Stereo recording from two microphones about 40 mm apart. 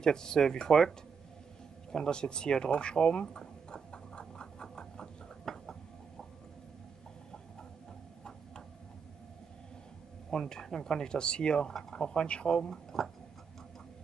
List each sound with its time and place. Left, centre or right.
0.0 s speech: centre
1.9 s a sound: centre
10.3 s speech: centre
12.6 s speech: centre